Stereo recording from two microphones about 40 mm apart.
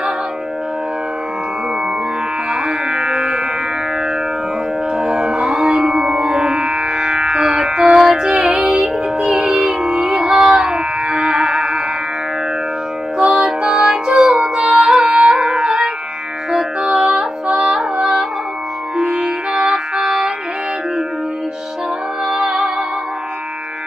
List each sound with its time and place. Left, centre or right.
2.5 s music: right
4.9 s music: right
13.2 s music: right
14.1 s music: centre
18.9 s music: centre
22.3 s music: centre